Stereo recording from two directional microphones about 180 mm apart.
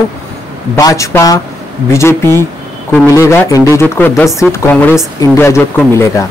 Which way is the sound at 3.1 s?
15° left (ahead or behind).